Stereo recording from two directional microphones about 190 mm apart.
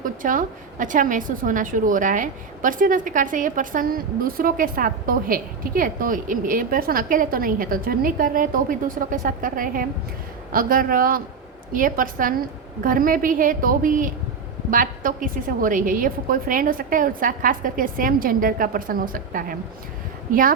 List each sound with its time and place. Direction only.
0.0 s a woman's voice: 45° right (ahead or behind)